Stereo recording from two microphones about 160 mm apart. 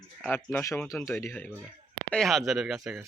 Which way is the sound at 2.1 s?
Centre (ahead or behind).